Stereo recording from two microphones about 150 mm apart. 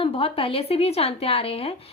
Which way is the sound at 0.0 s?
40° left (ahead or behind).